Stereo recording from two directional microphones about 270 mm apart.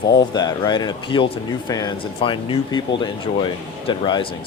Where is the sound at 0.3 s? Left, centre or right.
Centre.